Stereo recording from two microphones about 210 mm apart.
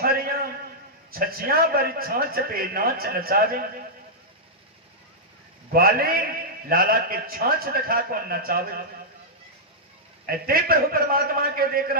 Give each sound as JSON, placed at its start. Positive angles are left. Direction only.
{"t": 0.0, "sound": "a sound", "side_deg": -45}
{"t": 1.1, "sound": "a man's voice", "side_deg": -45}
{"t": 5.7, "sound": "a man's voice", "side_deg": -45}
{"t": 10.2, "sound": "a man's voice", "side_deg": -45}